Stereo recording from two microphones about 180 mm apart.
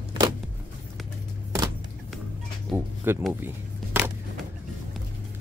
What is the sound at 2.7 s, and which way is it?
Speech, 15° right (ahead or behind).